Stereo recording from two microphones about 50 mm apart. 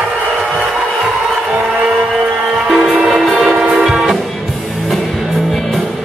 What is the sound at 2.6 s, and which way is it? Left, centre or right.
Music, centre.